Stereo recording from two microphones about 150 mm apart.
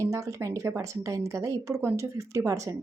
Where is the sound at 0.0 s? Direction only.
20° right (ahead or behind).